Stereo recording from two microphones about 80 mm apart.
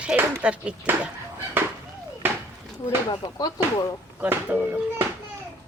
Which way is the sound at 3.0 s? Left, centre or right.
Left.